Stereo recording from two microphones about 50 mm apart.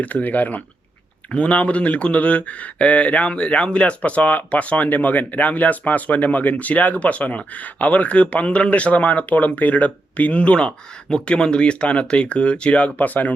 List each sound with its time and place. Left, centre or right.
0.0 s speech: left